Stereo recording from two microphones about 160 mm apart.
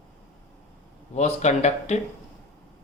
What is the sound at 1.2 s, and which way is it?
Speech, 45° left (ahead or behind).